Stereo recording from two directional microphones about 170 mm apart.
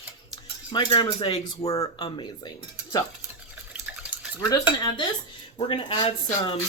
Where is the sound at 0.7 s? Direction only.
25° left (ahead or behind).